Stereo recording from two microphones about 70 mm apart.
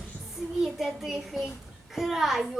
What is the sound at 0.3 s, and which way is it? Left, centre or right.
Child singing, centre.